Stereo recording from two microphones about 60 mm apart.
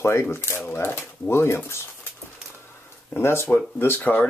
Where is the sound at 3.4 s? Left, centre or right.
Left.